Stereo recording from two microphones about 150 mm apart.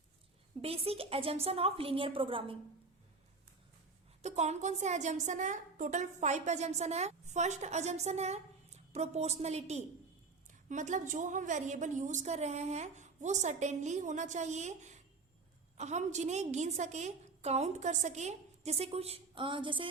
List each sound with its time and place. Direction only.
0.6 s a woman's voice: 40° right (ahead or behind)
4.2 s a woman's voice: 50° right (ahead or behind)